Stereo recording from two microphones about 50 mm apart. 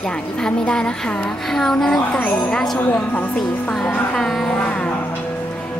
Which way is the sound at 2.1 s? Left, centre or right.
Left.